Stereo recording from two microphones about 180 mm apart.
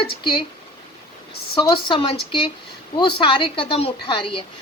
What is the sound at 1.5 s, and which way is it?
A woman's voice, 30° left (ahead or behind).